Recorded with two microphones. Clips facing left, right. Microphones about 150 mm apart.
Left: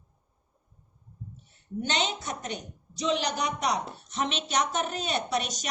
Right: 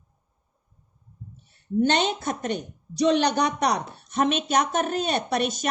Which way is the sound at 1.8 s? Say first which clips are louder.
Right 8 dB; 55° right (ahead or behind).